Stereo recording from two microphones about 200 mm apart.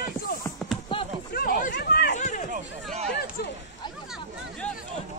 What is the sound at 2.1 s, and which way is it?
Run, 35° left (ahead or behind).